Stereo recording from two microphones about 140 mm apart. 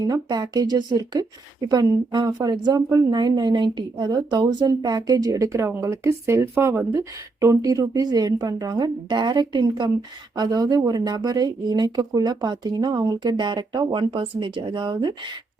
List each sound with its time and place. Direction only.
0.0 s speech: 30° right (ahead or behind)